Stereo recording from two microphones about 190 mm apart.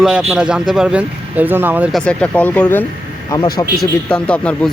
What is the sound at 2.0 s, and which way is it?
Speech, 5° left (ahead or behind).